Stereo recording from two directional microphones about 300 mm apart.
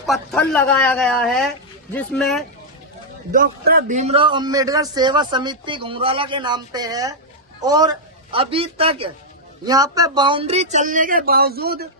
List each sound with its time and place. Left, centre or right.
0.0 s speech: centre
3.3 s a man's voice: right